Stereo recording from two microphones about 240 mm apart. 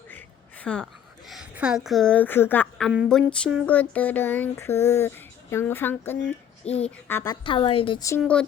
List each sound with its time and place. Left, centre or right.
0.1 s a sound: centre
1.3 s a woman's voice: centre
7.4 s a woman's voice: left
8.2 s speech: centre